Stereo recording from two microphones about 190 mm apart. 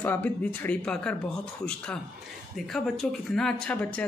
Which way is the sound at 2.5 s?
Centre (ahead or behind).